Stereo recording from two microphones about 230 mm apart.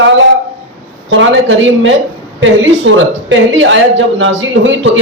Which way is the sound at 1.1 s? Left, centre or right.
Right.